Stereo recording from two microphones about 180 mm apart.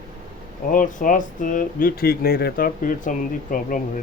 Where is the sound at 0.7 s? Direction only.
45° left (ahead or behind).